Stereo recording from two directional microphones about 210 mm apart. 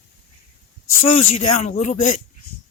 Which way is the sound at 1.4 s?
30° left (ahead or behind).